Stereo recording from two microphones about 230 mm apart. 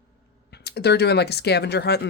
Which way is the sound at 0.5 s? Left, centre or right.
Left.